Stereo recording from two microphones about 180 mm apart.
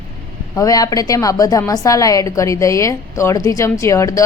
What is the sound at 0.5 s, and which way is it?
A woman's voice, 20° left (ahead or behind).